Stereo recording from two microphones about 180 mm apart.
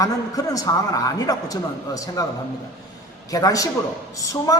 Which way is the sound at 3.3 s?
20° left (ahead or behind).